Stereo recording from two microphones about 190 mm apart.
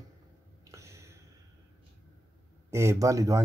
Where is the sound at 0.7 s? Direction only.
15° right (ahead or behind).